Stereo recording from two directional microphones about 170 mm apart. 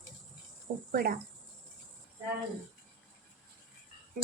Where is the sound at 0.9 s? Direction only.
60° right (ahead or behind).